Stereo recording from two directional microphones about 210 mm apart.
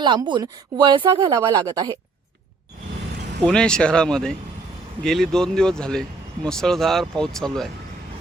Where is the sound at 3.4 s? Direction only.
5° left (ahead or behind).